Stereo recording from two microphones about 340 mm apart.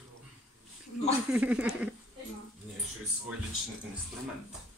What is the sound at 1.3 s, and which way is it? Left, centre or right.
Speech, centre.